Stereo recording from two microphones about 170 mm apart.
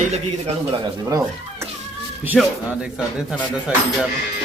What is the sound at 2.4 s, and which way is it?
Speech, 5° right (ahead or behind).